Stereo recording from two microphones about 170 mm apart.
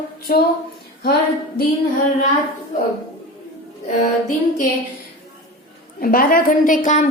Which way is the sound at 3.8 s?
50° left (ahead or behind).